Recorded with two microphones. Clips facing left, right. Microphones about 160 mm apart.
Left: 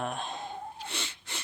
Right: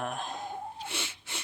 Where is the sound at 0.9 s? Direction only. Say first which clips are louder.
Even; 5° right (ahead or behind).